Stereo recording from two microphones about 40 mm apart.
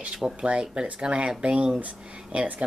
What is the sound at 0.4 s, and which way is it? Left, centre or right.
Speech, right.